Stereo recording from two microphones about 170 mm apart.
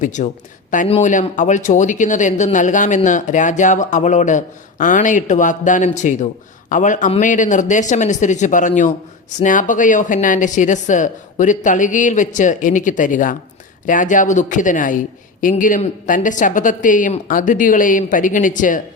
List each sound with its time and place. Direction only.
0.0 s a man's voice: 45° left (ahead or behind)